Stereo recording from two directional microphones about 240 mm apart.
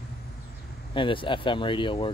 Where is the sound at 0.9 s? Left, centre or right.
Left.